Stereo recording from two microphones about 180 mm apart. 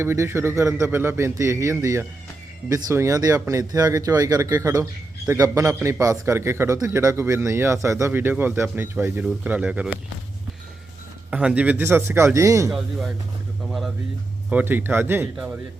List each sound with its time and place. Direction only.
0.0 s a man's voice: 15° right (ahead or behind)
11.3 s a man's voice: 5° right (ahead or behind)
12.7 s speech: centre (ahead or behind)
14.5 s a man's voice: 10° right (ahead or behind)